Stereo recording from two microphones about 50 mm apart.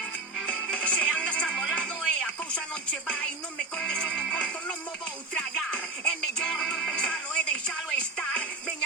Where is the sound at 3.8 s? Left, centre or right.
Centre.